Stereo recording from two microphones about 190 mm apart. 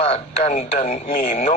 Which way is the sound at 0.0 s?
35° left (ahead or behind).